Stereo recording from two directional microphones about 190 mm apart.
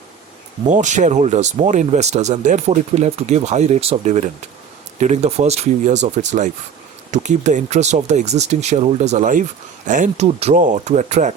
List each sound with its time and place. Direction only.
0.7 s speech: 40° right (ahead or behind)